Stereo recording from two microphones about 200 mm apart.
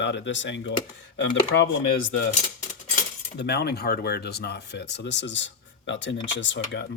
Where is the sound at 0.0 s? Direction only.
60° left (ahead or behind).